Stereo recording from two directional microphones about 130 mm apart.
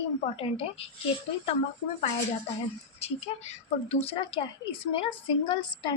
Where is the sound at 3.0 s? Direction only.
55° left (ahead or behind).